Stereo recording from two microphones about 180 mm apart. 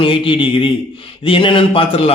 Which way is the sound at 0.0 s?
30° left (ahead or behind).